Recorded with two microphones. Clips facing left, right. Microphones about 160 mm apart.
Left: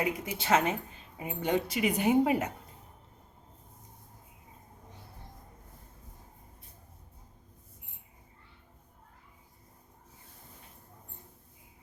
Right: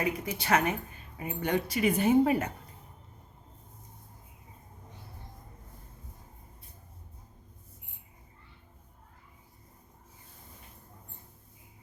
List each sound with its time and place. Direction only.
0.0 s speech: 20° left (ahead or behind)